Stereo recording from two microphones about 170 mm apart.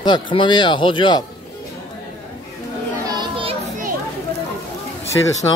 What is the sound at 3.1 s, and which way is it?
Children playing, 30° right (ahead or behind).